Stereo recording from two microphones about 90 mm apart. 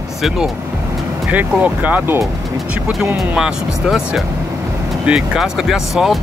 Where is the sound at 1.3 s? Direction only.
15° right (ahead or behind).